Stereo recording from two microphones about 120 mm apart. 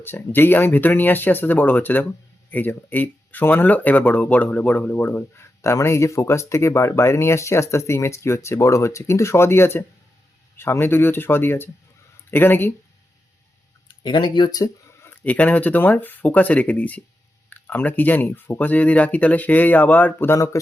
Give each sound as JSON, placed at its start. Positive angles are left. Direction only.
{"t": 0.0, "sound": "speech", "side_deg": 15}
{"t": 14.0, "sound": "speech", "side_deg": 40}
{"t": 15.2, "sound": "speech", "side_deg": 15}